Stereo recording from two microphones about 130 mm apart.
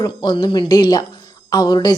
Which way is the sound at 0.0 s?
35° left (ahead or behind).